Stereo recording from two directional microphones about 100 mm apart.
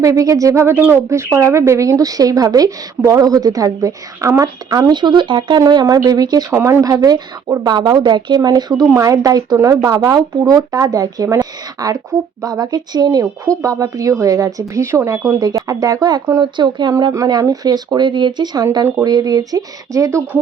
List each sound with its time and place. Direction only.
0.0 s speech: 35° right (ahead or behind)
6.6 s speech: 30° right (ahead or behind)
7.7 s speech: 45° right (ahead or behind)
9.9 s speech: 45° right (ahead or behind)
16.4 s speech: 50° right (ahead or behind)
17.2 s speech: 40° right (ahead or behind)